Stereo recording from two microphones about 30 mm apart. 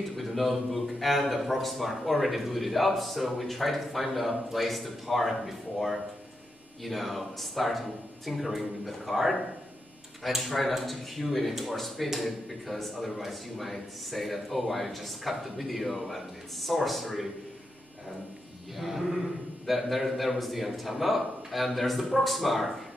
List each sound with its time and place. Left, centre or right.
0.1 s speech: centre
18.8 s speech: centre